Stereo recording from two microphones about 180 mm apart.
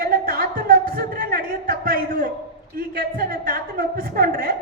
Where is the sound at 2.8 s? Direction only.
55° right (ahead or behind).